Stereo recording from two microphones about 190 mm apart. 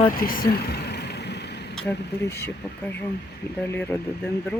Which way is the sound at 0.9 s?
60° left (ahead or behind).